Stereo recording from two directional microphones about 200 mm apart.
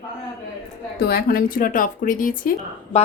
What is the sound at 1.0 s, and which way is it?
A woman's voice, 50° left (ahead or behind).